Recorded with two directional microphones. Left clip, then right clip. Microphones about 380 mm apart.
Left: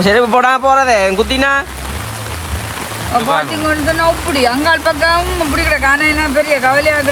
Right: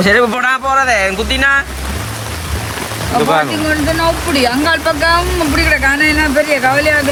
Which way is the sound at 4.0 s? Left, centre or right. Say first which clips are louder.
Left 2 dB; left.